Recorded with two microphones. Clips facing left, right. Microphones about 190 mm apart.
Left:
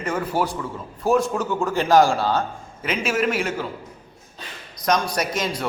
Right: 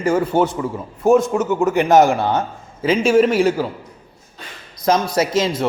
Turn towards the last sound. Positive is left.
turn(degrees=-25)  # may be behind; listen again after turning